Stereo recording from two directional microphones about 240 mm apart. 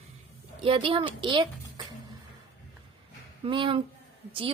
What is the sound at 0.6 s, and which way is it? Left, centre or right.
A woman's voice, right.